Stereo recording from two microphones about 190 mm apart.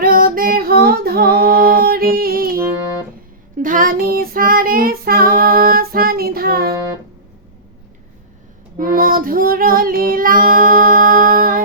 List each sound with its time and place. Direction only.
0.0 s female singing: 50° right (ahead or behind)
3.6 s child singing: 45° right (ahead or behind)
8.8 s child singing: 50° right (ahead or behind)